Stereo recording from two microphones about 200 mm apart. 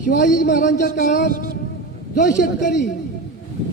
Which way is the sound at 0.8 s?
40° left (ahead or behind).